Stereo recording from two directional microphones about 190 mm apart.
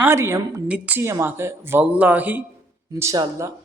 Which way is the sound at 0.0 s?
15° right (ahead or behind).